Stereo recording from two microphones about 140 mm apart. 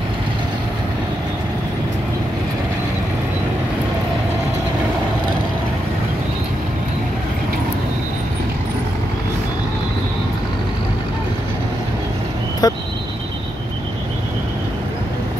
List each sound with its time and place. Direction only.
12.6 s vehicle: 30° left (ahead or behind)